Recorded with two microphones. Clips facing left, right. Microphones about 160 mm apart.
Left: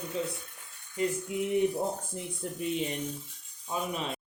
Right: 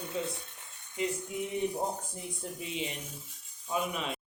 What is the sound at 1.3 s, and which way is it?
Speech, 65° left (ahead or behind).